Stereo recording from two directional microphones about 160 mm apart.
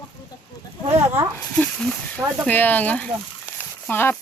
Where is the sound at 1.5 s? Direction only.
5° left (ahead or behind).